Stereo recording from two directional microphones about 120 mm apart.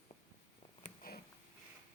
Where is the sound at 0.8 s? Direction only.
75° left (ahead or behind).